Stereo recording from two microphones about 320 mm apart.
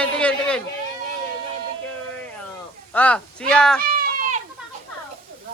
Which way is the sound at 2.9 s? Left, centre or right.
Centre.